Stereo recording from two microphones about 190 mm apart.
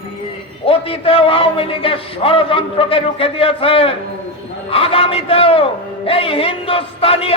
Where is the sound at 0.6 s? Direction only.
30° left (ahead or behind).